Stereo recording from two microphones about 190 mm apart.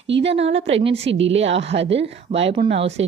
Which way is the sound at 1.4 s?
35° right (ahead or behind).